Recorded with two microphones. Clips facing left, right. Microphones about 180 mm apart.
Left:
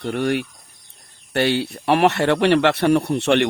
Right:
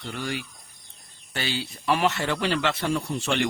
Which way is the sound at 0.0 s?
65° left (ahead or behind).